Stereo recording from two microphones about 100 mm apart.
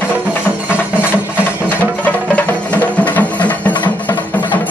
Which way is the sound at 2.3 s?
15° left (ahead or behind).